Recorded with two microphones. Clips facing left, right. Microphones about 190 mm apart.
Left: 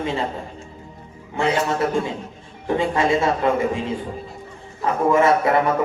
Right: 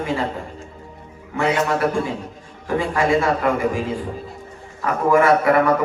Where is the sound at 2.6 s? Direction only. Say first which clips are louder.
Even; 25° left (ahead or behind).